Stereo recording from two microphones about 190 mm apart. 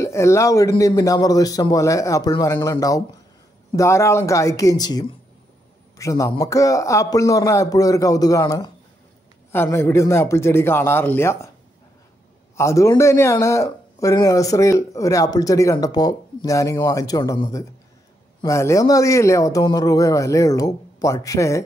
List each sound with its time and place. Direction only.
0.0 s a man's voice: 15° left (ahead or behind)
12.5 s a man's voice: 15° left (ahead or behind)